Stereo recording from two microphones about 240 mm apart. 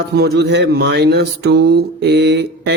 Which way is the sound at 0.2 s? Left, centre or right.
Right.